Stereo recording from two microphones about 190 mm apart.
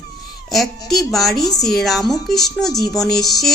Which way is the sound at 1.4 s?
20° left (ahead or behind).